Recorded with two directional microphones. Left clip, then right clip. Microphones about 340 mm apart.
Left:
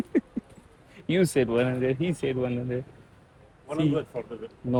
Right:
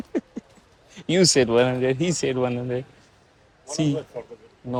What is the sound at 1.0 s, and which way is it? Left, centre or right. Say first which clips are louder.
Speech: right 5 dB; centre.